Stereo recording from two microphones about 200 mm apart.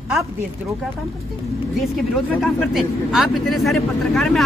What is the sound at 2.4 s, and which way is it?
Speech, centre (ahead or behind).